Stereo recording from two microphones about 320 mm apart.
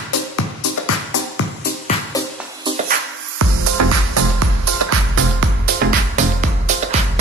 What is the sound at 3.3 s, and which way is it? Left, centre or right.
Music, right.